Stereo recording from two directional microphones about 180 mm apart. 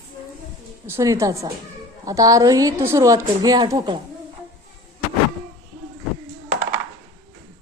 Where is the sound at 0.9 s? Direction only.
15° right (ahead or behind).